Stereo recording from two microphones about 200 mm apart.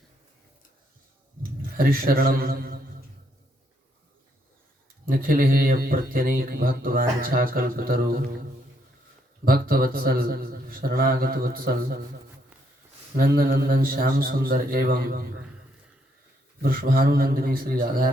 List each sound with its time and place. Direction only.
1.4 s a sound: 45° right (ahead or behind)
5.2 s speech: 45° right (ahead or behind)
9.4 s speech: 50° right (ahead or behind)
13.1 s speech: 45° right (ahead or behind)
16.6 s speech: 45° right (ahead or behind)